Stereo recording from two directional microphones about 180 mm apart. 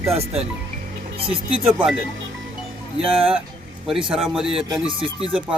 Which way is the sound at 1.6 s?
5° right (ahead or behind).